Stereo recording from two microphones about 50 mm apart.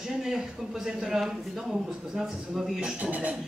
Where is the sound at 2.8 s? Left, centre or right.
Right.